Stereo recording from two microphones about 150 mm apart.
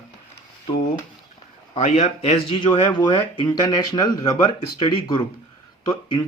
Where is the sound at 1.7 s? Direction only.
45° left (ahead or behind).